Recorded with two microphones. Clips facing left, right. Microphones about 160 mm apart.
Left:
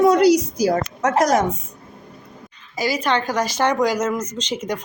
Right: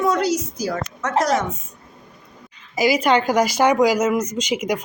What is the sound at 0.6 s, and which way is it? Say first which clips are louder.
Speech: left 7 dB; 40° left (ahead or behind).